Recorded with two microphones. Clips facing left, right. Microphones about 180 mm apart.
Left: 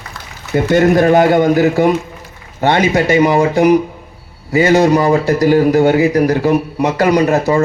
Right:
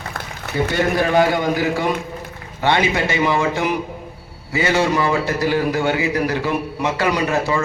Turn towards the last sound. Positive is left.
turn(degrees=40)  # may be behind; listen again after turning